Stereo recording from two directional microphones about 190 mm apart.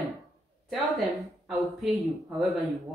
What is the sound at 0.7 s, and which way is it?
Speech, centre (ahead or behind).